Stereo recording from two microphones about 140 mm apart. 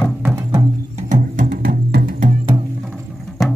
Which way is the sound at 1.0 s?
65° right (ahead or behind).